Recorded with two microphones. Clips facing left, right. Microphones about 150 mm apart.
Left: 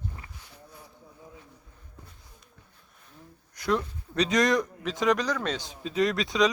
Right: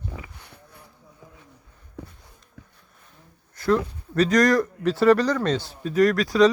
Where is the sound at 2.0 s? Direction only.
90° right.